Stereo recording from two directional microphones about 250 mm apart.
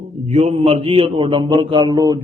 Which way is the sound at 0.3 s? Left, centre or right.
Right.